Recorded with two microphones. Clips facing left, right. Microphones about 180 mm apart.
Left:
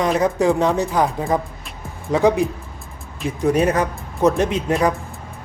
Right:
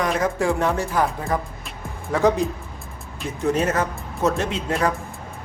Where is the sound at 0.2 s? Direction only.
20° left (ahead or behind).